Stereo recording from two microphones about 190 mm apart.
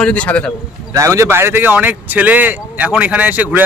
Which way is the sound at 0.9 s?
15° right (ahead or behind).